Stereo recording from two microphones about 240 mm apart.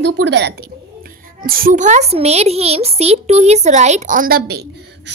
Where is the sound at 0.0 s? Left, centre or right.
Right.